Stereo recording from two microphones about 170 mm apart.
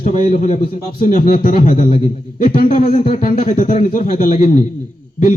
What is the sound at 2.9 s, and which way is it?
Speech, 35° left (ahead or behind).